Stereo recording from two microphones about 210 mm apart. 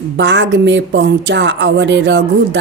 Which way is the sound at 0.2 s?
60° right (ahead or behind).